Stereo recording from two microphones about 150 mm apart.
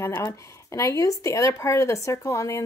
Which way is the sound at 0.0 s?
15° left (ahead or behind).